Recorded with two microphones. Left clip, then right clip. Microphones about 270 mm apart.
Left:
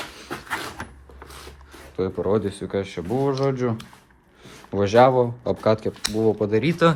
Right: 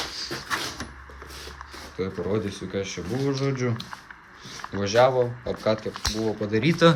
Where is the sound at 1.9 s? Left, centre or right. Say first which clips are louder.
Left 5 dB; centre.